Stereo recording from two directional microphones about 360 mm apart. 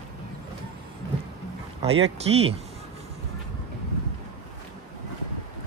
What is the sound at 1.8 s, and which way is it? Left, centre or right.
Speech, centre.